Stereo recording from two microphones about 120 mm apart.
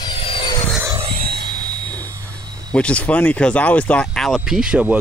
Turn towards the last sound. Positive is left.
turn(degrees=-10)  # may be behind; listen again after turning